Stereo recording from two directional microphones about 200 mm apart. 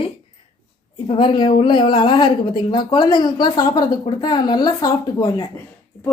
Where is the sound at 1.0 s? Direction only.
25° left (ahead or behind).